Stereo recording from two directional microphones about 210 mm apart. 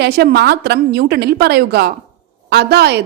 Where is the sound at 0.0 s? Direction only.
50° right (ahead or behind).